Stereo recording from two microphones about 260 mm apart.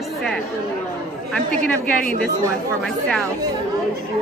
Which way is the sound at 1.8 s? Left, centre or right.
Left.